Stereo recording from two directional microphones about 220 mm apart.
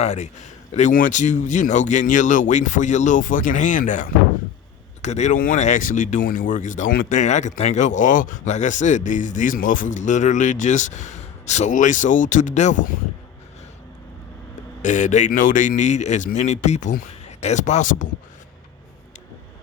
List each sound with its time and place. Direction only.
0.0 s speech: 30° left (ahead or behind)
14.8 s speech: 35° left (ahead or behind)